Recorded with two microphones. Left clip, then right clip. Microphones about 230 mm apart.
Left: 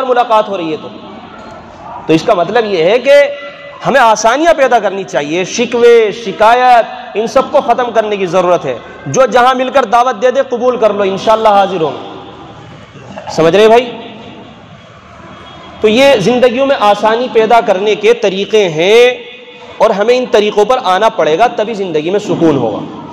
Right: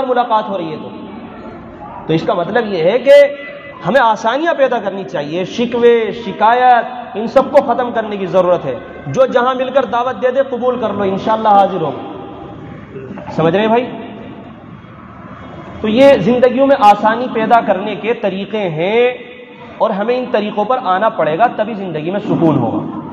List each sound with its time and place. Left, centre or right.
0.1 s a man's voice: left
2.0 s a man's voice: left
13.4 s a man's voice: left
15.8 s a man's voice: left